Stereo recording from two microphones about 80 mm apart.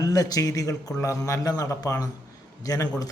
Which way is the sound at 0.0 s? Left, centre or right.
Left.